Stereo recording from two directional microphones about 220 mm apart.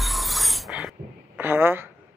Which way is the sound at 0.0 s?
Centre (ahead or behind).